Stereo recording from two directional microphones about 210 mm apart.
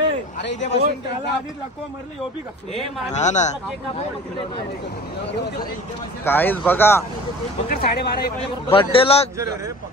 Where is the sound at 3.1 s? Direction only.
35° left (ahead or behind).